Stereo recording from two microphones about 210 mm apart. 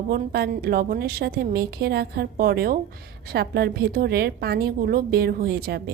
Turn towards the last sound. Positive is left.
turn(degrees=-45)  # may be behind; listen again after turning